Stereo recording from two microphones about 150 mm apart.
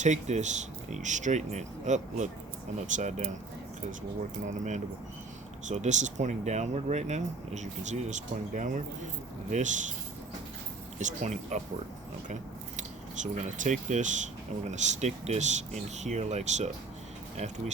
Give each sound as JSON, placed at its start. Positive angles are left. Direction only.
{"t": 0.0, "sound": "speech", "side_deg": -50}
{"t": 4.4, "sound": "speech", "side_deg": -55}
{"t": 10.9, "sound": "speech", "side_deg": -50}
{"t": 13.2, "sound": "speech", "side_deg": -55}